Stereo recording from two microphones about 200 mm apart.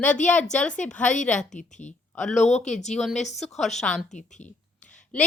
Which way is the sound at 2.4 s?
35° left (ahead or behind).